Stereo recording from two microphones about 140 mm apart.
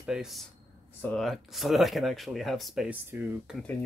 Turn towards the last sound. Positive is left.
turn(degrees=-5)  # may be behind; listen again after turning